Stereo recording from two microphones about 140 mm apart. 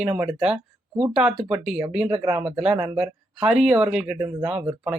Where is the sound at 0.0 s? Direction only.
10° right (ahead or behind).